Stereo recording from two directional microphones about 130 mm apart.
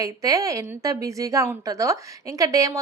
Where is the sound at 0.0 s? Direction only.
25° right (ahead or behind).